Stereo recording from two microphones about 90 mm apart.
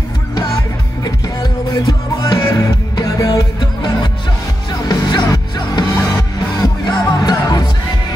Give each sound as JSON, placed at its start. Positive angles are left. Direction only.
{"t": 1.0, "sound": "music", "side_deg": 50}